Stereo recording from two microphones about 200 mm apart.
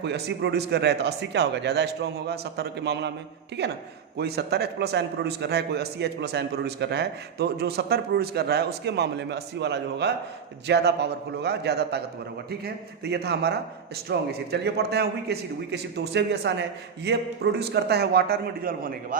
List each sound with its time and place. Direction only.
0.0 s a man's voice: 60° right (ahead or behind)